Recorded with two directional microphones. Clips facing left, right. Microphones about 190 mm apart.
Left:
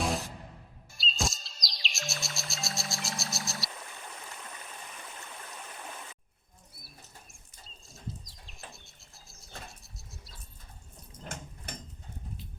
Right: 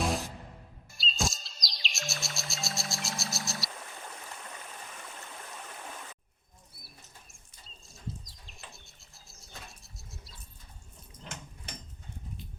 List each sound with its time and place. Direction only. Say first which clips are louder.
0.9 s music: right 1 dB; centre (ahead or behind)
7.9 s bird flight: right 1 dB; centre (ahead or behind)
11.2 s a sound: left 3 dB; 50° left (ahead or behind)